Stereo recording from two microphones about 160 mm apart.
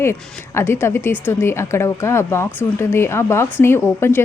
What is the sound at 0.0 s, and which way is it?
A woman's voice, 15° left (ahead or behind).